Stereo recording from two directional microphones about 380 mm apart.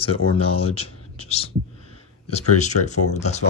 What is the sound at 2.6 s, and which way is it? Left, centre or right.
Speech, centre.